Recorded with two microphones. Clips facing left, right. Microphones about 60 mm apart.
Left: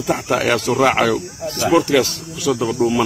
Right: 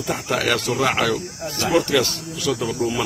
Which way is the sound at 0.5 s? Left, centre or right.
Left.